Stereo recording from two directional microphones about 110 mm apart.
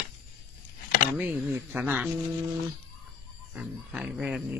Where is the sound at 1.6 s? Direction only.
15° right (ahead or behind).